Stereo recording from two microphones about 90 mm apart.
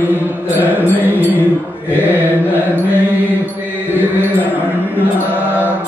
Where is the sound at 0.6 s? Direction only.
20° right (ahead or behind).